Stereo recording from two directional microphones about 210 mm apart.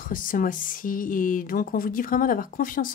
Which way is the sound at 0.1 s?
40° left (ahead or behind).